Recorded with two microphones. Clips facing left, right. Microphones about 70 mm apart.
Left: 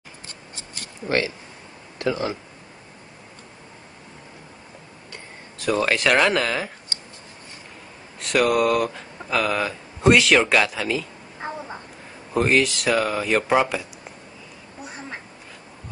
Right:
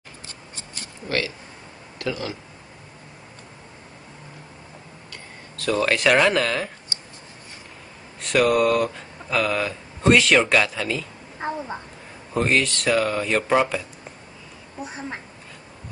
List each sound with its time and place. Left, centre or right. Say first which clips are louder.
1.0 s speech: left 3 dB; left
5.1 s a sound: left 1 dB; centre
5.9 s speech: right 2 dB; centre
8.2 s speech: right 1 dB; centre